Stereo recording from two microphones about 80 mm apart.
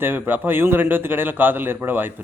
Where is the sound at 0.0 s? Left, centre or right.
Right.